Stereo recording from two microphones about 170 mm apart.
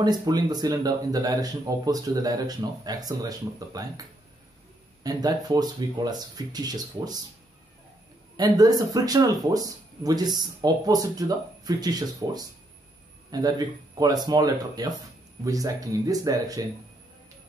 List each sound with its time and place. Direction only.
0.0 s speech: 25° right (ahead or behind)
5.0 s speech: 25° right (ahead or behind)
8.4 s speech: 20° right (ahead or behind)